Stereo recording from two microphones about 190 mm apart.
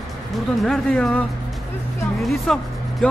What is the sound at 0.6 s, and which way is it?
Speech, 5° left (ahead or behind).